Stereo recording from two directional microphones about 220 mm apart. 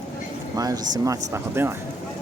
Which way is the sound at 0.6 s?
15° right (ahead or behind).